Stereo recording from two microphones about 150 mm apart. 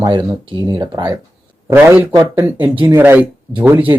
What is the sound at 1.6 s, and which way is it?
Speech, 15° right (ahead or behind).